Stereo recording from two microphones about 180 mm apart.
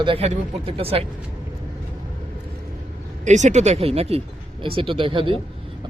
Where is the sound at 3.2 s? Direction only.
40° right (ahead or behind).